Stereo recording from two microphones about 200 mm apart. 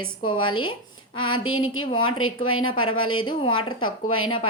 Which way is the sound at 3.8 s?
90° left.